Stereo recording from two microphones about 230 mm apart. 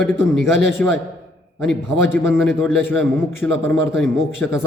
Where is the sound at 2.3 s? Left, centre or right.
Centre.